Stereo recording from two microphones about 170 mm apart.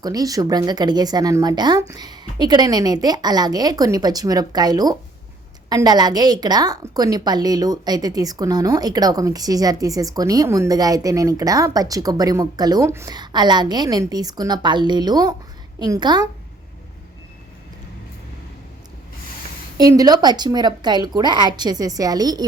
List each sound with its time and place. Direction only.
0.0 s a woman's voice: 20° right (ahead or behind)
19.7 s a woman's voice: 20° right (ahead or behind)